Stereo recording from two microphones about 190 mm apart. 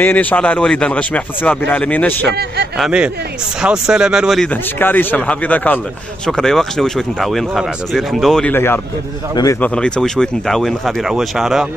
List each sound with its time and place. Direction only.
0.0 s speech: 10° left (ahead or behind)
2.3 s speech: 60° right (ahead or behind)
2.8 s speech: 5° right (ahead or behind)
4.7 s a man's voice: 10° left (ahead or behind)
9.6 s speech: 5° left (ahead or behind)